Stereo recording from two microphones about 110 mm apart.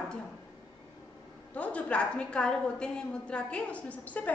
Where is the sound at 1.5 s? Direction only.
10° left (ahead or behind).